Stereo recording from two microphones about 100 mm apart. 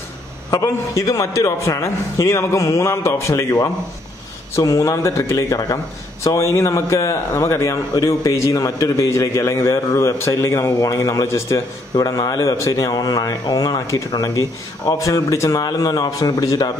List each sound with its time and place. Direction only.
0.5 s a man's voice: 30° left (ahead or behind)
4.6 s a man's voice: 30° left (ahead or behind)